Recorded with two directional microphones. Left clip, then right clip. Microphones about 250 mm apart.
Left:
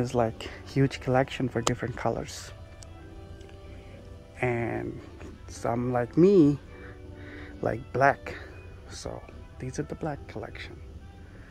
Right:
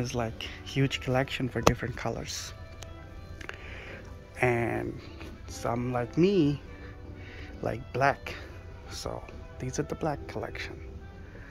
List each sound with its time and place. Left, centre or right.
0.1 s speech: left
4.4 s speech: centre